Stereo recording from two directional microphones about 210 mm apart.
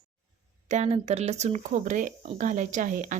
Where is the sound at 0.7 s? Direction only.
30° right (ahead or behind).